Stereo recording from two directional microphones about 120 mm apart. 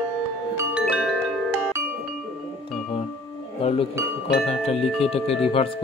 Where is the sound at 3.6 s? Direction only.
50° left (ahead or behind).